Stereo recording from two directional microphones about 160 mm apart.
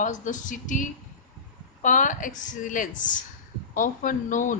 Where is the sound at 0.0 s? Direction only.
50° left (ahead or behind).